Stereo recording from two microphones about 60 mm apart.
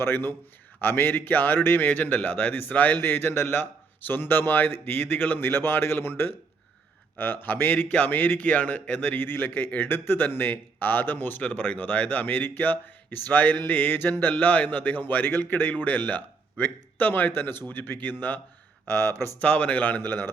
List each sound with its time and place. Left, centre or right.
0.0 s speech: left
19.4 s speech: left
20.0 s speech: left